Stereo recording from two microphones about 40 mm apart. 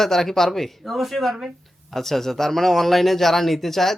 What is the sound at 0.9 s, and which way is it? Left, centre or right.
Speech, centre.